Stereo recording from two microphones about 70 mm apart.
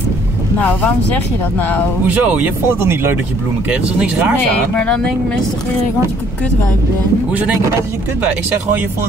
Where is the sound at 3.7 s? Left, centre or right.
Centre.